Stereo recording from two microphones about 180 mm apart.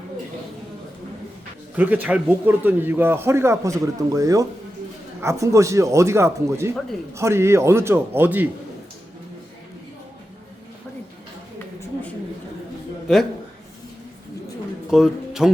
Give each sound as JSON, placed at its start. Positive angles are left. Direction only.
{"t": 1.7, "sound": "a man's voice", "side_deg": -10}
{"t": 14.8, "sound": "speech", "side_deg": -5}